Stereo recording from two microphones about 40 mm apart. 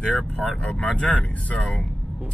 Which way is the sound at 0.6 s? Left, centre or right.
Left.